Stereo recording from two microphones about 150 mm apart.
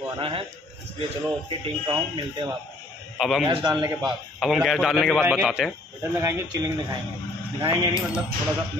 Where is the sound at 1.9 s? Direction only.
25° right (ahead or behind).